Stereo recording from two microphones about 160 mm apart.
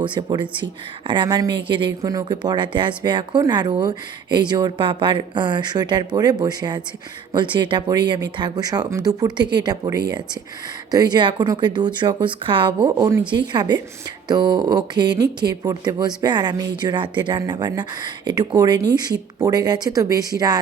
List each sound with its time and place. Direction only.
0.0 s speech: 30° right (ahead or behind)